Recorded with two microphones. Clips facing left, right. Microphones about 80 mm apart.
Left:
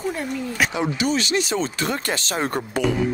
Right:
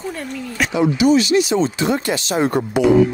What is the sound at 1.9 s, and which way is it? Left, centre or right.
Speech, right.